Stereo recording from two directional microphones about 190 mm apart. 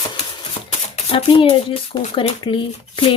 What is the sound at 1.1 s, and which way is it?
Speech, 30° left (ahead or behind).